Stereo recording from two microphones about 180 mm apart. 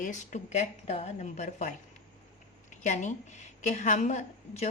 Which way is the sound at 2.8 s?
40° left (ahead or behind).